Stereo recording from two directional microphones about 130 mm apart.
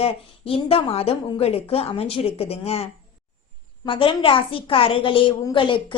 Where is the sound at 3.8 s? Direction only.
40° left (ahead or behind).